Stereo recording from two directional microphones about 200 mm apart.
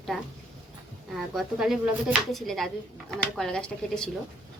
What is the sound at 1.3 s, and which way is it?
A woman's voice, centre (ahead or behind).